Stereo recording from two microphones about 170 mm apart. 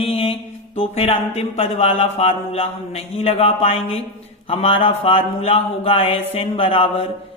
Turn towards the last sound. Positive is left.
turn(degrees=30)  # may be behind; listen again after turning